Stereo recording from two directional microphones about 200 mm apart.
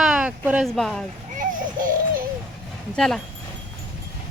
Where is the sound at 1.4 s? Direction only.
45° right (ahead or behind).